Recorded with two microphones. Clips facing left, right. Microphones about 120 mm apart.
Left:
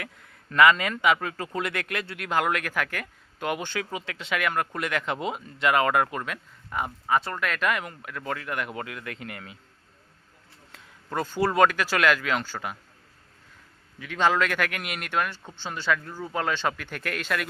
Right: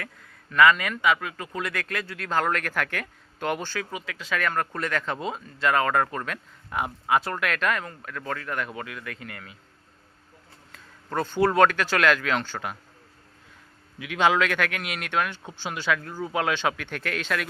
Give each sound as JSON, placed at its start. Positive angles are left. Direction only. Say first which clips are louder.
{"t": 0.0, "sound": "a man's voice", "louder": "even", "side_deg": 20}
{"t": 3.6, "sound": "a man's voice", "louder": "left 1 dB", "side_deg": 20}
{"t": 4.4, "sound": "speech", "louder": "even", "side_deg": 10}
{"t": 6.7, "sound": "a man's voice", "louder": "right 1 dB", "side_deg": -5}
{"t": 11.1, "sound": "speech", "louder": "right 3 dB", "side_deg": 10}
{"t": 14.0, "sound": "speech", "louder": "right 1 dB", "side_deg": -5}